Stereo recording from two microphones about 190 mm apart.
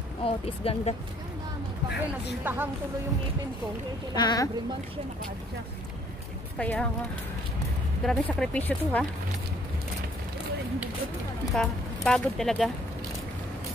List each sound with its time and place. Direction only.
0.2 s speech: 30° left (ahead or behind)
2.4 s speech: 10° right (ahead or behind)
4.1 s speech: 20° left (ahead or behind)
6.6 s a woman's voice: 10° left (ahead or behind)
8.0 s speech: 5° left (ahead or behind)
11.5 s speech: 5° left (ahead or behind)